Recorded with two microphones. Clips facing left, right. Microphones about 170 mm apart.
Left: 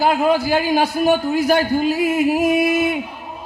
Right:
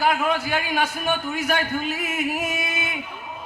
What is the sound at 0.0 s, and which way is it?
A man's voice, 30° left (ahead or behind).